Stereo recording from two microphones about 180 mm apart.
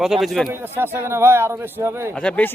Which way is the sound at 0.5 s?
10° right (ahead or behind).